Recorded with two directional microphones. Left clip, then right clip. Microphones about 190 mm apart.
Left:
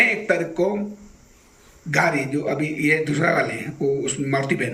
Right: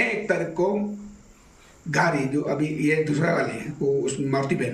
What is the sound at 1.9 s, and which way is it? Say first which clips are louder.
Speech: left 2 dB; 10° left (ahead or behind).